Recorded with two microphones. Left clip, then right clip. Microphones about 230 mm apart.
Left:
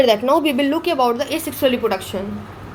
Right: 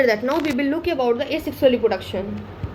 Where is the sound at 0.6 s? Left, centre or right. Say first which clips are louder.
Left 4 dB; left.